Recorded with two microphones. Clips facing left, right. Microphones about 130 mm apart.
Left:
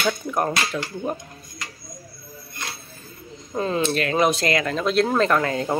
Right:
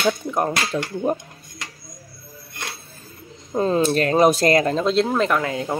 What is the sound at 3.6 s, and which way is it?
Speech, 35° right (ahead or behind).